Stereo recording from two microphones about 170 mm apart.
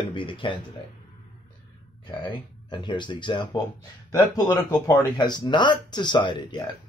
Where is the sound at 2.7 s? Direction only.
25° left (ahead or behind).